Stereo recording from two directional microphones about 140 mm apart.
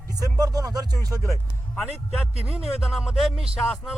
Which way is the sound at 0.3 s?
25° right (ahead or behind).